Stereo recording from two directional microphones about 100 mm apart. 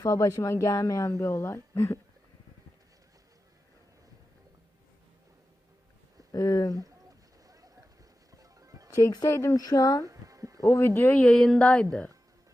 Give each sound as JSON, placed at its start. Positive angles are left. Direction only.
{"t": 0.0, "sound": "a woman's voice", "side_deg": 35}
{"t": 6.3, "sound": "a woman's voice", "side_deg": 35}
{"t": 7.4, "sound": "boat", "side_deg": -35}
{"t": 8.4, "sound": "music", "side_deg": -35}
{"t": 9.0, "sound": "a woman's voice", "side_deg": 30}
{"t": 10.0, "sound": "a sound", "side_deg": -35}
{"t": 10.6, "sound": "speech", "side_deg": 25}
{"t": 11.2, "sound": "a sound", "side_deg": 5}